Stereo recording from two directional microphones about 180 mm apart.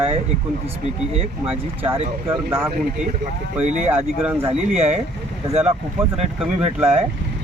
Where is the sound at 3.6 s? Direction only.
40° right (ahead or behind).